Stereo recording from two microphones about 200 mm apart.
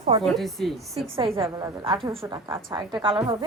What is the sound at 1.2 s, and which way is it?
A woman's voice, 25° right (ahead or behind).